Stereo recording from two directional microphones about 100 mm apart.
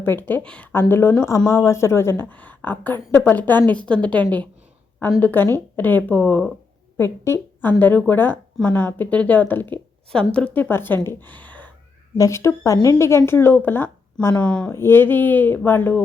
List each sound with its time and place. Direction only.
0.0 s speech: 20° left (ahead or behind)
0.7 s a woman's voice: 25° left (ahead or behind)
6.9 s a woman's voice: 25° left (ahead or behind)
12.1 s speech: 30° left (ahead or behind)
14.3 s a woman's voice: 10° left (ahead or behind)
14.7 s speech: 25° left (ahead or behind)